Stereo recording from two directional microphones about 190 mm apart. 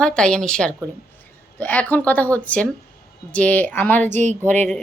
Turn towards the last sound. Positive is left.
turn(degrees=10)  # may be behind; listen again after turning